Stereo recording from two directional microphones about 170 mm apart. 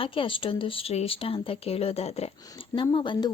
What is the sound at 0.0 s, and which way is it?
A woman's voice, 30° left (ahead or behind).